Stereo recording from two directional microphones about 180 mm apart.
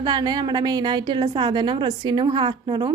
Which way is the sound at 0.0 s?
25° right (ahead or behind).